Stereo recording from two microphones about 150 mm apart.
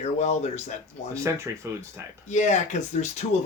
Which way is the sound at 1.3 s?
20° right (ahead or behind).